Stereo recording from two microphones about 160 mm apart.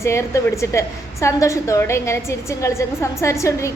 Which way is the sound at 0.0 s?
15° left (ahead or behind).